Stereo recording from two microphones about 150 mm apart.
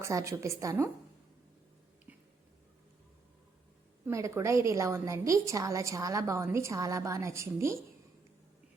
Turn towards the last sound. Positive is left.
turn(degrees=-20)  # may be behind; listen again after turning